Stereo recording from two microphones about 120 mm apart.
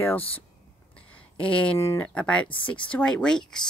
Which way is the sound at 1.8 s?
20° left (ahead or behind).